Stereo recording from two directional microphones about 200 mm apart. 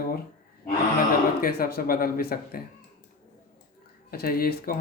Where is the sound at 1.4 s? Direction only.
50° left (ahead or behind).